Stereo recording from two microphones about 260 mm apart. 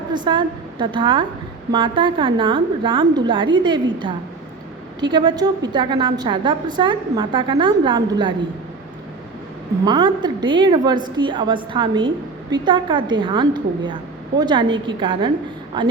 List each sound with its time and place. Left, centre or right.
0.1 s a woman's voice: centre
5.1 s a woman's voice: centre
9.8 s a woman's voice: centre